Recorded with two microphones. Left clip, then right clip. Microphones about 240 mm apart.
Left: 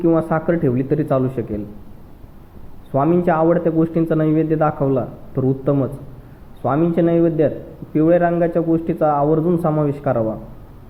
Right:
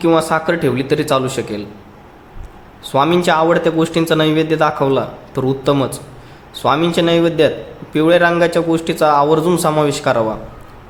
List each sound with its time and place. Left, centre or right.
0.0 s speech: centre
2.9 s speech: centre